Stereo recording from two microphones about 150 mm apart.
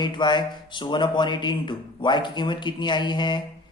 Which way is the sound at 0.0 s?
30° left (ahead or behind).